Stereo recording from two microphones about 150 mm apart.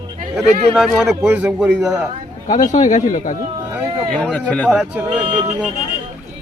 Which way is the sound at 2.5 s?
60° left (ahead or behind).